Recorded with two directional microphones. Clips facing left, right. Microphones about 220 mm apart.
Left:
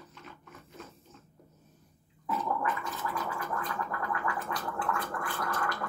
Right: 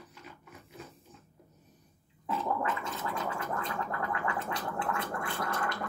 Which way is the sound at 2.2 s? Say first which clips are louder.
Even; 25° right (ahead or behind).